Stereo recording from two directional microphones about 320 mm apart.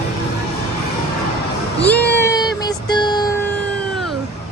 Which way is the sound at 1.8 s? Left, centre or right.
Centre.